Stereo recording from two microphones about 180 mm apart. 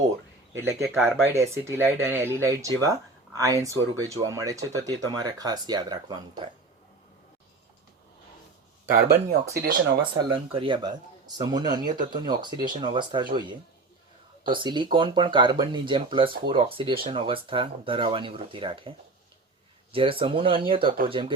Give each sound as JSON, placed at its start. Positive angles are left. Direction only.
{"t": 0.5, "sound": "speech", "side_deg": -15}
{"t": 9.0, "sound": "speech", "side_deg": -60}
{"t": 10.0, "sound": "speech", "side_deg": -25}